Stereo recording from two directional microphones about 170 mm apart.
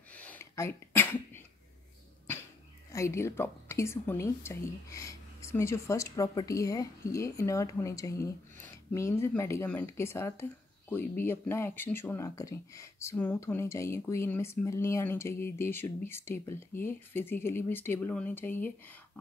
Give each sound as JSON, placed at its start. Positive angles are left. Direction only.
{"t": 0.1, "sound": "sneeze", "side_deg": 10}
{"t": 2.9, "sound": "speech", "side_deg": 15}